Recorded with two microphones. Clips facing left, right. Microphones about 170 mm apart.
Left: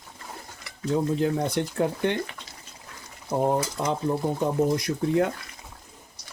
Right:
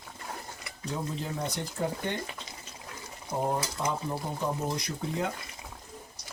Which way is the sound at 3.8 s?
60° left (ahead or behind).